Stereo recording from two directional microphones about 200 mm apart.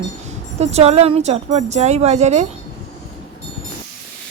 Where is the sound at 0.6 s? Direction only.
30° right (ahead or behind).